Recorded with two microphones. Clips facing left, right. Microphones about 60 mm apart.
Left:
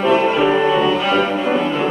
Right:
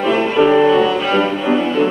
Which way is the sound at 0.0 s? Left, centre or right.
Centre.